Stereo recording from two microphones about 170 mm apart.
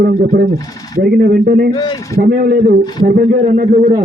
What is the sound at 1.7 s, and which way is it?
Speech, 25° left (ahead or behind).